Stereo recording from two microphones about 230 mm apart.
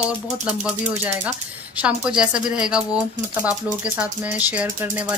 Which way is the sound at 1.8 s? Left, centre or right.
Centre.